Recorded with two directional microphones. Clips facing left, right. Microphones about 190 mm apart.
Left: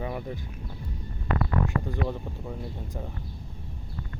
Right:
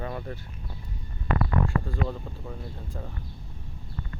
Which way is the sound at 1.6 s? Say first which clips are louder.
Even; 15° left (ahead or behind).